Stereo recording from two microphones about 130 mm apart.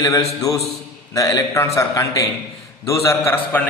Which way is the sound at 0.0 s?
25° left (ahead or behind).